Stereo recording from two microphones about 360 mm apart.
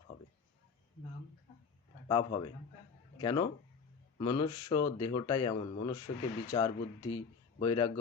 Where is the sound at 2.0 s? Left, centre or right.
Centre.